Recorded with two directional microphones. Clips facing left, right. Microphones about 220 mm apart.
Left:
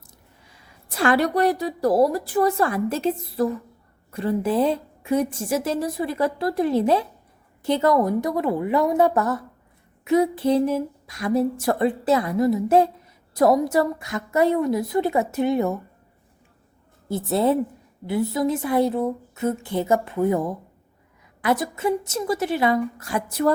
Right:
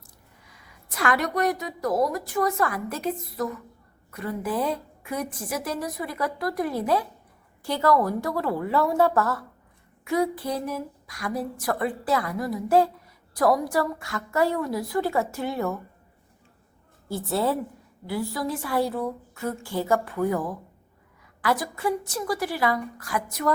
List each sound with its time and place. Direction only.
0.4 s a woman's voice: 30° left (ahead or behind)
17.1 s a woman's voice: 20° left (ahead or behind)